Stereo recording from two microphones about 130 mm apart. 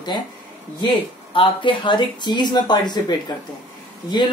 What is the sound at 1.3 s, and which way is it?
Speech, 40° left (ahead or behind).